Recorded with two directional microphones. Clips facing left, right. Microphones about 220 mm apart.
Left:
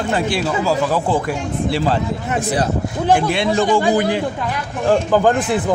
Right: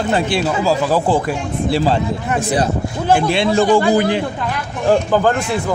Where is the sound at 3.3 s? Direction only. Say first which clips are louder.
Right 2 dB; 30° right (ahead or behind).